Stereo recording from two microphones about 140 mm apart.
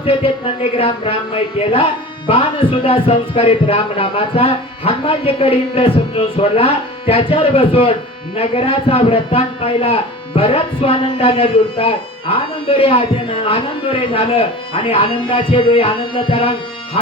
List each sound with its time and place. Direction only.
0.0 s a man's voice: 40° left (ahead or behind)